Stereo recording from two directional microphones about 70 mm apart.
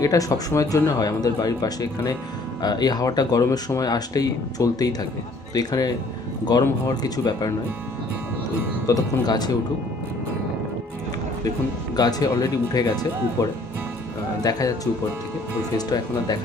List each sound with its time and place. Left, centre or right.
0.0 s speech: left
8.9 s speech: left
11.9 s speech: left
15.9 s speech: left